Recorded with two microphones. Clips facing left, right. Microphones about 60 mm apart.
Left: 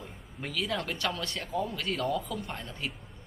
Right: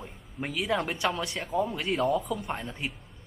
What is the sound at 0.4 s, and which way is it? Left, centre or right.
Speech, centre.